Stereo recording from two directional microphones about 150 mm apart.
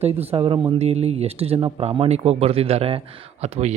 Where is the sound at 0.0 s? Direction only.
45° right (ahead or behind).